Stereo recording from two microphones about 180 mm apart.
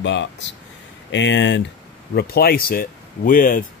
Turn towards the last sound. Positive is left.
turn(degrees=50)  # may be behind; listen again after turning